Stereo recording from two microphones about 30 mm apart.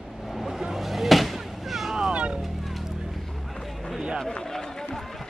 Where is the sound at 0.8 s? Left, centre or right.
Centre.